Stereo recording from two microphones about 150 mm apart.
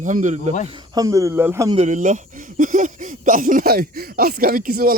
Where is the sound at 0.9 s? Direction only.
20° right (ahead or behind).